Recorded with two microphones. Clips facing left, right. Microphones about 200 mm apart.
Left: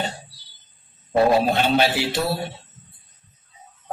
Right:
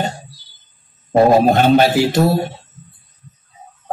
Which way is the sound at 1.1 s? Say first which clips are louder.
Right 6 dB; 45° right (ahead or behind).